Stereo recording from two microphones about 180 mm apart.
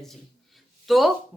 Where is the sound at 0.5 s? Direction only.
Centre (ahead or behind).